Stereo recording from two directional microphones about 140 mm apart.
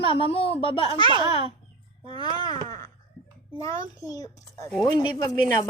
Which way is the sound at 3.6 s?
25° left (ahead or behind).